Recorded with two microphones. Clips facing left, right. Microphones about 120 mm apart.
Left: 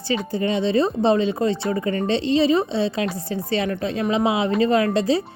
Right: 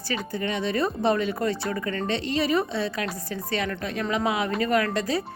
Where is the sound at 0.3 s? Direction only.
30° left (ahead or behind).